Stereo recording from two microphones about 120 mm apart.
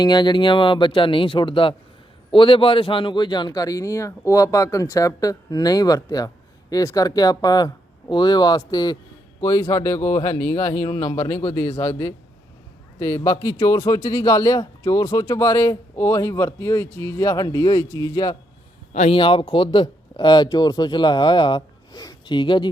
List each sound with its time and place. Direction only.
0.0 s a man's voice: 35° left (ahead or behind)
19.1 s a man's voice: 45° left (ahead or behind)